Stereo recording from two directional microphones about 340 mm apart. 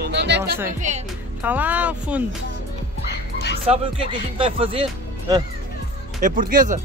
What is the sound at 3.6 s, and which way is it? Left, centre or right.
Speech, centre.